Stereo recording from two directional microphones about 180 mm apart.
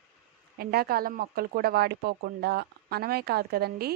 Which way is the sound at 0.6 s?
55° right (ahead or behind).